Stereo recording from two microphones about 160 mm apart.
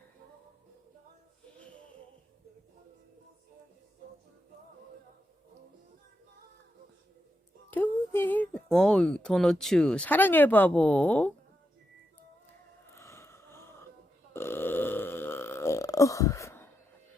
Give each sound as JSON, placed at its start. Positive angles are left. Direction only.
{"t": 8.1, "sound": "speech", "side_deg": 10}
{"t": 12.9, "sound": "a sound", "side_deg": 15}
{"t": 14.3, "sound": "burping", "side_deg": 15}